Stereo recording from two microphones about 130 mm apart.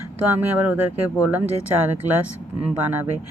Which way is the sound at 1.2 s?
10° right (ahead or behind).